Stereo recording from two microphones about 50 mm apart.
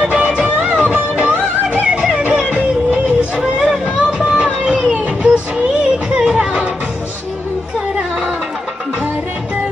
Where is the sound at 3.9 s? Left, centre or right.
Centre.